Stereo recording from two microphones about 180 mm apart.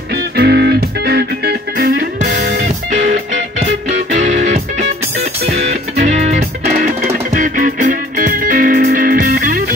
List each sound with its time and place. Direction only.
0.4 s music: 65° right (ahead or behind)
2.9 s music: 45° right (ahead or behind)
6.2 s music: 45° right (ahead or behind)